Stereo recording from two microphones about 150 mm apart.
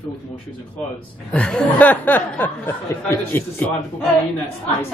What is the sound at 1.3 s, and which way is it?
Speech, 10° left (ahead or behind).